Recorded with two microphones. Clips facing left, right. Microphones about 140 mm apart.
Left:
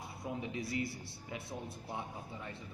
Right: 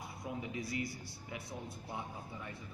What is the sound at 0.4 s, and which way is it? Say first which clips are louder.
A man's voice: left 2 dB; 25° left (ahead or behind).